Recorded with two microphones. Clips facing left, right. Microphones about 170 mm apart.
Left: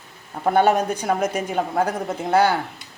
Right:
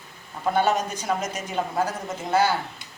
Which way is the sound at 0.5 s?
55° left (ahead or behind).